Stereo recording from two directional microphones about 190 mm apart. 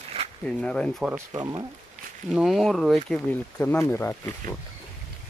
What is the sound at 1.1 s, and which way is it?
Speech, 20° right (ahead or behind).